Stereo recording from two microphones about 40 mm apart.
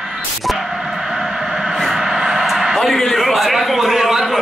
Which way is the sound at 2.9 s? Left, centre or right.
Centre.